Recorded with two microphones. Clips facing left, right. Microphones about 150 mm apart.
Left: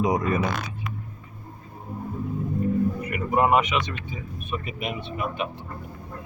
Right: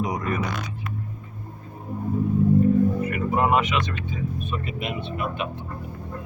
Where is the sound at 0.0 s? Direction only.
25° left (ahead or behind).